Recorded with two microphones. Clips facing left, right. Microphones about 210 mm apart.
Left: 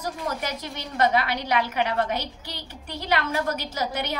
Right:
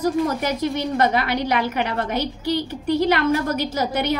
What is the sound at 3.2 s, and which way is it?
Speech, 50° right (ahead or behind).